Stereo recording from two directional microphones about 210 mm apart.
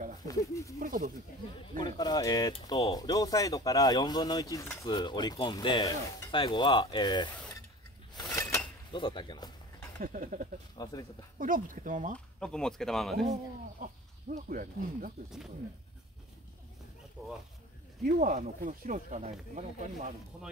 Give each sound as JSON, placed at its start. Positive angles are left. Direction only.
{"t": 0.3, "sound": "speech", "side_deg": 15}
{"t": 0.7, "sound": "speech", "side_deg": -40}
{"t": 1.8, "sound": "speech", "side_deg": 20}
{"t": 8.2, "sound": "a sound", "side_deg": 15}
{"t": 10.0, "sound": "speech", "side_deg": -40}
{"t": 10.8, "sound": "speech", "side_deg": 15}
{"t": 11.3, "sound": "speech", "side_deg": -40}
{"t": 12.4, "sound": "speech", "side_deg": 5}
{"t": 13.2, "sound": "speech", "side_deg": -30}
{"t": 17.2, "sound": "speech", "side_deg": 0}
{"t": 18.0, "sound": "speech", "side_deg": -40}